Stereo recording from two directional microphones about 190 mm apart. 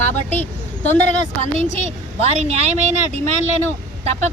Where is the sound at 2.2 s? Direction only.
35° right (ahead or behind).